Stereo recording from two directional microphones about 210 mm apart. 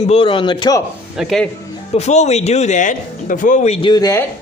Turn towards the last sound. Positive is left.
turn(degrees=20)  # may be behind; listen again after turning